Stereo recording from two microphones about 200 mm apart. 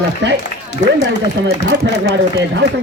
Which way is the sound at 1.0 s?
60° right (ahead or behind).